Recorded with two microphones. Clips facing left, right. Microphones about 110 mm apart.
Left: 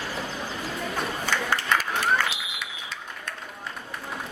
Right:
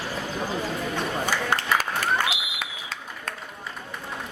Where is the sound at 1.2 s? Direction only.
15° right (ahead or behind).